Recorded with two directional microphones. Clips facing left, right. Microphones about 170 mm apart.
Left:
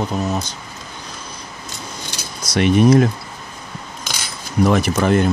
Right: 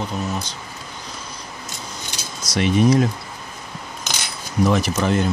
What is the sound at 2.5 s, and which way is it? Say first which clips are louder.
Speech: left 4 dB; 60° left (ahead or behind).